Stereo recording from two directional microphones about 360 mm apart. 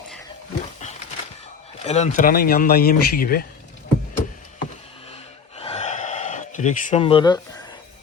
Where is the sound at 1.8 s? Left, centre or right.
Centre.